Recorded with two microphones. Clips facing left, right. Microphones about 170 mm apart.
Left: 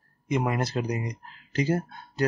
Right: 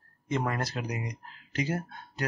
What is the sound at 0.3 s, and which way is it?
Speech, 15° left (ahead or behind).